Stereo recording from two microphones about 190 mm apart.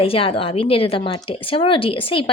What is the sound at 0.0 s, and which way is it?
A woman's voice, 30° left (ahead or behind).